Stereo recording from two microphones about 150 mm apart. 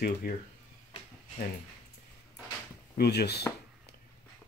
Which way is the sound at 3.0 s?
90° left.